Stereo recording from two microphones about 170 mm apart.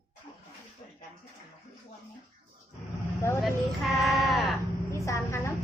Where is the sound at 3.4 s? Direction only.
Centre (ahead or behind).